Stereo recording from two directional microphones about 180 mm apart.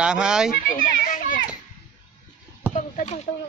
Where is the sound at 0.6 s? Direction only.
50° left (ahead or behind).